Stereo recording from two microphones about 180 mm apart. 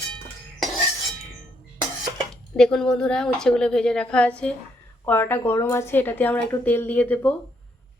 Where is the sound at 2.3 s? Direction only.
5° left (ahead or behind).